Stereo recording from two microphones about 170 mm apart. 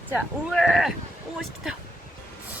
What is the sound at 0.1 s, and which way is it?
Speech, centre (ahead or behind).